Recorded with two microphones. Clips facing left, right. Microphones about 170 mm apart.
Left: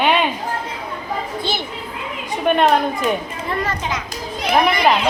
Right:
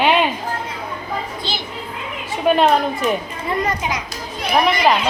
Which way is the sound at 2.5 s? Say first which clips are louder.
Right 1 dB; centre (ahead or behind).